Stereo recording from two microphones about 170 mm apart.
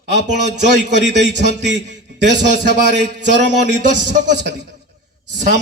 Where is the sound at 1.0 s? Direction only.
90° right.